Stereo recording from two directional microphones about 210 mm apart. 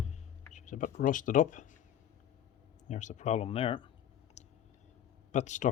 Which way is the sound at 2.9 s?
35° left (ahead or behind).